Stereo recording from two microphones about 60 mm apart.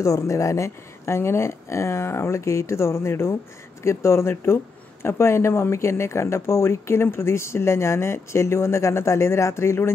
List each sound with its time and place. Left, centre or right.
0.0 s speech: left